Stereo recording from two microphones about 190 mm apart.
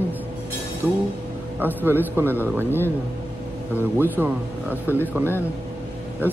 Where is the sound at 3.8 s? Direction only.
10° right (ahead or behind).